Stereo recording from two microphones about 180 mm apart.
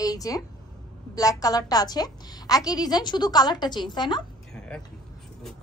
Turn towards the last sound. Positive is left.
turn(degrees=5)  # may be behind; listen again after turning